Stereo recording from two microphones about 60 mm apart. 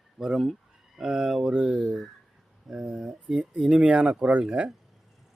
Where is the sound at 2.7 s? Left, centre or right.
Centre.